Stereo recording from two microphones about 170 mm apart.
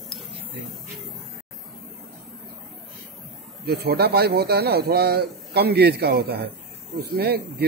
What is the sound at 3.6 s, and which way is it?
Speech, 70° right (ahead or behind).